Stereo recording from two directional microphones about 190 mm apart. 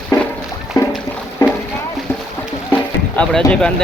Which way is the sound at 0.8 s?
20° left (ahead or behind).